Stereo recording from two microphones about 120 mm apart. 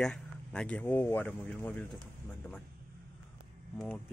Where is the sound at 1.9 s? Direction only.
Centre (ahead or behind).